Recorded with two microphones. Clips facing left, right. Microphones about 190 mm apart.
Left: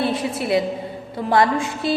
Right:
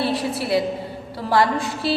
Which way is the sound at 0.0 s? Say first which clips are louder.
Left 1 dB; 20° left (ahead or behind).